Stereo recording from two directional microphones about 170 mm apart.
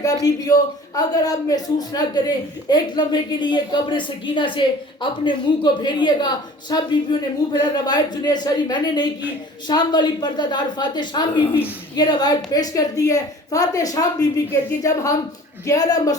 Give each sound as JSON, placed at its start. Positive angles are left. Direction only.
{"t": 0.0, "sound": "a man's voice", "side_deg": 20}